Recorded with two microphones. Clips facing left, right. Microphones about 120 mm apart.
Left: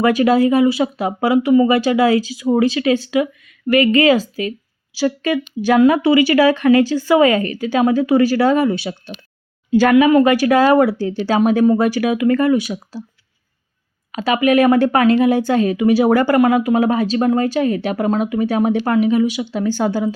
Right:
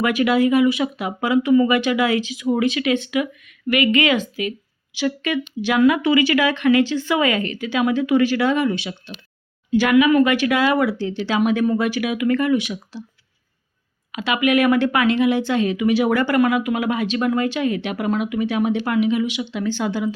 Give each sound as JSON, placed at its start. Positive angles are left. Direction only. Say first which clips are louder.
{"t": 0.0, "sound": "speech", "louder": "left 4 dB", "side_deg": 35}
{"t": 14.1, "sound": "speech", "louder": "left 4 dB", "side_deg": 35}